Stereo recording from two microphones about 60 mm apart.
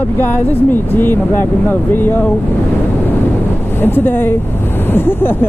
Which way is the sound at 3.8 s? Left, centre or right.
Left.